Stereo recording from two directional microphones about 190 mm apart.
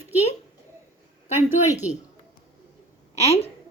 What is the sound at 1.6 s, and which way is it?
Speech, 35° left (ahead or behind).